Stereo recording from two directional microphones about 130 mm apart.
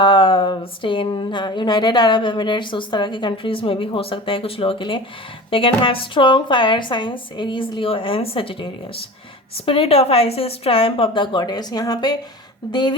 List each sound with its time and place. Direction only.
0.0 s speech: 40° left (ahead or behind)
9.6 s speech: 45° left (ahead or behind)